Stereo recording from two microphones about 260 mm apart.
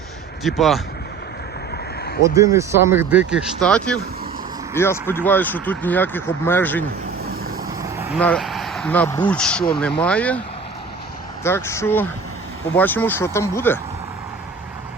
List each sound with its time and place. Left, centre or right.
0.4 s speech: centre
1.7 s a sound: left
2.2 s speech: centre
7.3 s vehicle: right
7.8 s vehicle: centre
8.2 s speech: centre
11.4 s speech: centre